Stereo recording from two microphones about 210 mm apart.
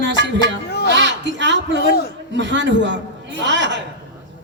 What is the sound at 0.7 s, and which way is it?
Speech, 50° left (ahead or behind).